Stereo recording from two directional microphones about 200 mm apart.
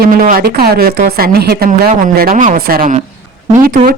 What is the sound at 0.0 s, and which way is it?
Speech, 45° right (ahead or behind).